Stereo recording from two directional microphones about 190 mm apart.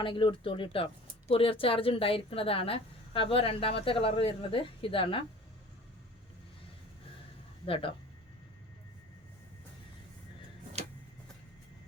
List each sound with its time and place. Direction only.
0.0 s a woman's voice: 25° left (ahead or behind)
7.6 s a woman's voice: 30° left (ahead or behind)